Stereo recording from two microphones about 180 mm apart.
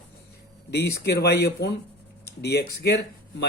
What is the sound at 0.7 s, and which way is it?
Speech, 65° left (ahead or behind).